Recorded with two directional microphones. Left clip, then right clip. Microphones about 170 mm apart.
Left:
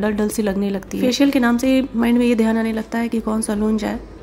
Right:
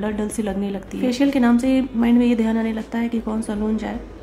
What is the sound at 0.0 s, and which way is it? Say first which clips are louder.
A woman's voice: left 5 dB; 25° left (ahead or behind).